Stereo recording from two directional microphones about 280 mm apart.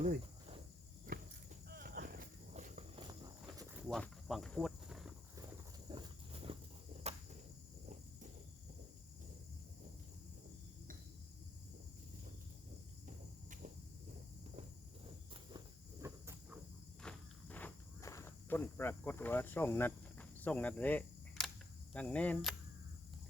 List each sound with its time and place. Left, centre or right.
1.7 s walk: right
3.8 s cricket: centre
5.9 s a sound: centre
7.1 s cricket: right
15.3 s walk: centre
17.0 s walk: centre
21.9 s speech: centre